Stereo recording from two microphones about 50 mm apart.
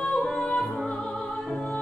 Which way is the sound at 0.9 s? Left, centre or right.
Left.